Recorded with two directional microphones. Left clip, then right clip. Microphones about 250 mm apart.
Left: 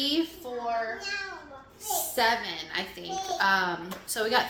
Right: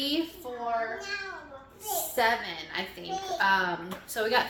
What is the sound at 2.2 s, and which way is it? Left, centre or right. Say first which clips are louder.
A woman's voice: left 1 dB; centre.